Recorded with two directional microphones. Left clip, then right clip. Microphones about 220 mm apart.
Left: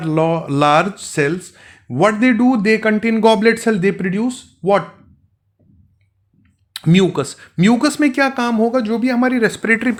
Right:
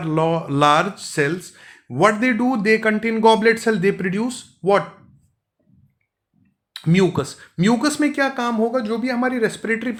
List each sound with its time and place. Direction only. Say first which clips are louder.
0.0 s speech: left 3 dB; 25° left (ahead or behind)
6.7 s speech: left 3 dB; 35° left (ahead or behind)